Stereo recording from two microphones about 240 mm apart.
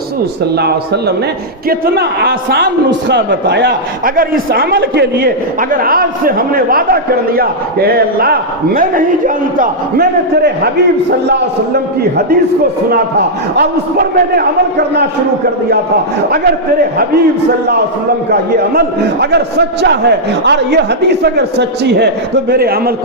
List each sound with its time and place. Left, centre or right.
0.5 s a man's voice: right
18.3 s a man's voice: right